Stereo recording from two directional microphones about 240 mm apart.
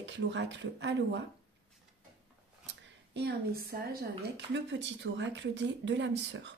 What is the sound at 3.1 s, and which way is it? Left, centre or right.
Speech, right.